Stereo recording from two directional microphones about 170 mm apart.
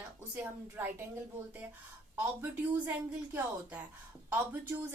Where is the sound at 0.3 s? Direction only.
15° right (ahead or behind).